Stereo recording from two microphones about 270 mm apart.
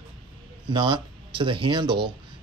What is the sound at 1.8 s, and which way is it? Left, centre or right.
Speech, right.